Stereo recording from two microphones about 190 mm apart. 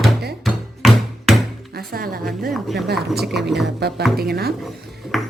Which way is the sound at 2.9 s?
Centre (ahead or behind).